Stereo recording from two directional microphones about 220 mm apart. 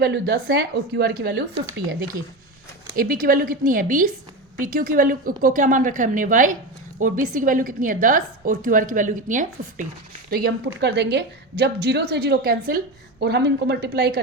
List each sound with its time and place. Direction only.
0.0 s a woman's voice: 45° right (ahead or behind)
2.9 s a woman's voice: 40° right (ahead or behind)
10.2 s a woman's voice: 45° right (ahead or behind)